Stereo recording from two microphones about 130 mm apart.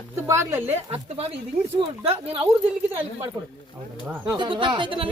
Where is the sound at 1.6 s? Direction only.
55° right (ahead or behind).